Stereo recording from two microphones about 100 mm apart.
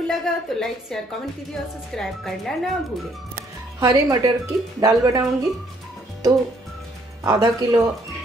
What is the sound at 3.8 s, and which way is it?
Speech, 35° right (ahead or behind).